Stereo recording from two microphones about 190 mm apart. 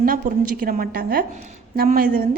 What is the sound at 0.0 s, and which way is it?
A woman's voice, 50° right (ahead or behind).